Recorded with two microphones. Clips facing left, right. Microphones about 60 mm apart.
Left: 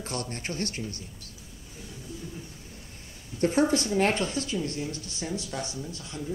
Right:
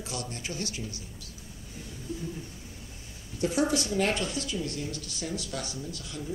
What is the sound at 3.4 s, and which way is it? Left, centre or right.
Speech, left.